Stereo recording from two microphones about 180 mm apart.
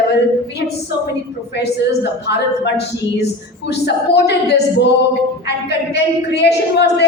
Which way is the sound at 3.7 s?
65° left (ahead or behind).